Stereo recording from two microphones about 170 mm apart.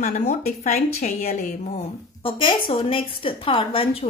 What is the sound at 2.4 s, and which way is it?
A woman's voice, 30° left (ahead or behind).